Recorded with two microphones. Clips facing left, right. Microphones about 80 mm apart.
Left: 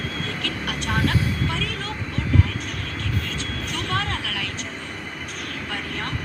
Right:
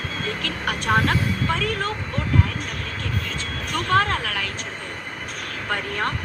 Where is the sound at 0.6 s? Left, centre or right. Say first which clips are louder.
Right 5 dB; right.